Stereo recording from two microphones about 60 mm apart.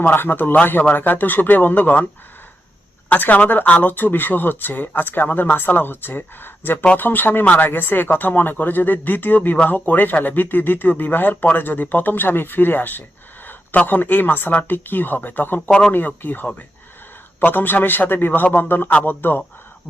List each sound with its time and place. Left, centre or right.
0.0 s speech: left
3.1 s speech: left